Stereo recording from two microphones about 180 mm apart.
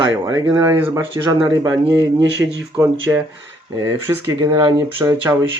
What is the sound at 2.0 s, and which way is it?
Speech, 85° right.